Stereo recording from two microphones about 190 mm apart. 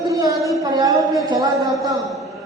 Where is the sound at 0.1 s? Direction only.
15° right (ahead or behind).